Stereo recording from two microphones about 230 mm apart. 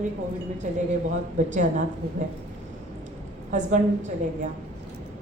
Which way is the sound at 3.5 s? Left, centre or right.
Right.